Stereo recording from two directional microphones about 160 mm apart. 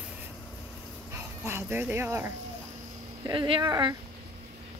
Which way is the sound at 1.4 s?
15° right (ahead or behind).